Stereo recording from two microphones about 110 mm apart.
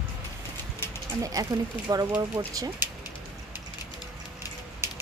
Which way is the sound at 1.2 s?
35° right (ahead or behind).